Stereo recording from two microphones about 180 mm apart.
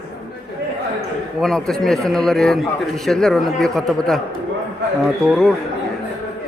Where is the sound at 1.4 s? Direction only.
Centre (ahead or behind).